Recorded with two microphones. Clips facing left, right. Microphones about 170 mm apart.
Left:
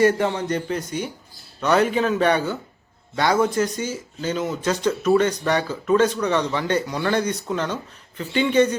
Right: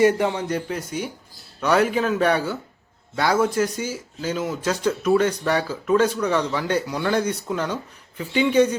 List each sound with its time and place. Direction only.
0.0 s speech: 15° right (ahead or behind)